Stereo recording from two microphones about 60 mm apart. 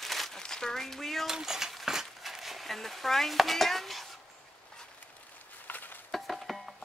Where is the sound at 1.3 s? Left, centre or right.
Centre.